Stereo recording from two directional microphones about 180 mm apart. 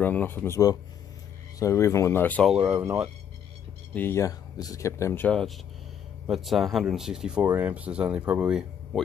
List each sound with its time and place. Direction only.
0.0 s speech: 10° left (ahead or behind)
2.5 s speech: 10° right (ahead or behind)
3.9 s speech: 15° left (ahead or behind); by 9.0 s 5° right (ahead or behind)